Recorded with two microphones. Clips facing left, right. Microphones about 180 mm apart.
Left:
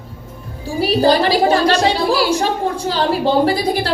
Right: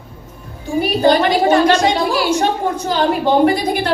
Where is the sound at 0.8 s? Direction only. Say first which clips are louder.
Even; 35° left (ahead or behind).